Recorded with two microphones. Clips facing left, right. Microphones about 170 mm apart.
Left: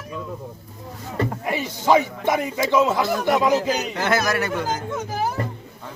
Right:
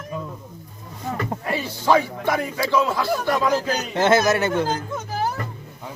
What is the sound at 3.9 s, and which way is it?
Speech, 25° right (ahead or behind).